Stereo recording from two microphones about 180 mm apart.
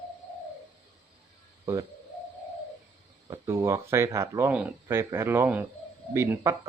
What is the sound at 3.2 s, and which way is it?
Speech, 15° right (ahead or behind).